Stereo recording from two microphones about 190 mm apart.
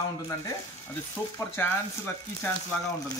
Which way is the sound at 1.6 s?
10° left (ahead or behind).